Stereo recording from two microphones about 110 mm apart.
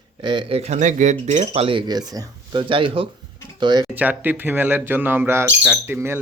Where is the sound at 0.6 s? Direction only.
90° right; by 3.8 s 40° right (ahead or behind).